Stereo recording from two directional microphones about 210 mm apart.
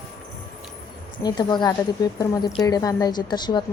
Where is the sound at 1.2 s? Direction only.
20° left (ahead or behind).